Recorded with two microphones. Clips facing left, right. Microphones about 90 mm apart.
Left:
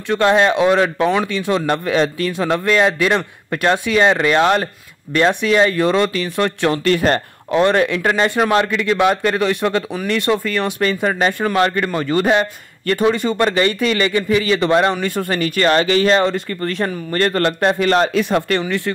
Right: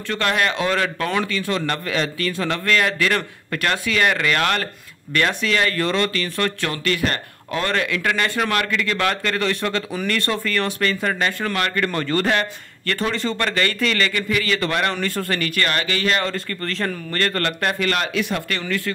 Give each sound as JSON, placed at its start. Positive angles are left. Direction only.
{"t": 0.1, "sound": "speech", "side_deg": 25}